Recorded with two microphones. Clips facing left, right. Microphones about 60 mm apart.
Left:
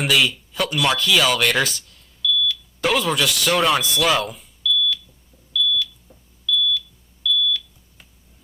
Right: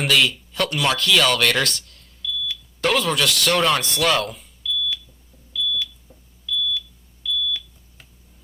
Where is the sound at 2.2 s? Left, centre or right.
Right.